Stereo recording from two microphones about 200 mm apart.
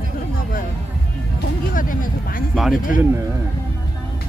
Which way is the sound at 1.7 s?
45° left (ahead or behind).